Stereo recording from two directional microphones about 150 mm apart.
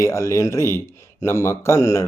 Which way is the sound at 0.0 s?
20° left (ahead or behind).